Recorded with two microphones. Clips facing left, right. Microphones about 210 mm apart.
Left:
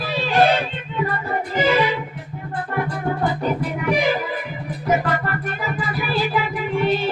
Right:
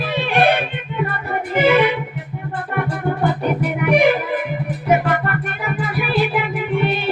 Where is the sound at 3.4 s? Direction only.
65° right (ahead or behind).